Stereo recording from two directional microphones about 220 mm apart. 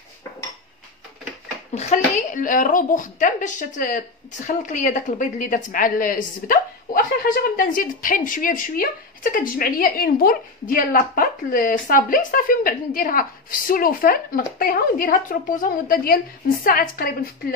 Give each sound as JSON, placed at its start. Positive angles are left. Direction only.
{"t": 1.8, "sound": "a woman's voice", "side_deg": 30}